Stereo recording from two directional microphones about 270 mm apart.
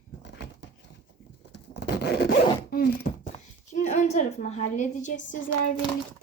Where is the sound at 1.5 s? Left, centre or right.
Left.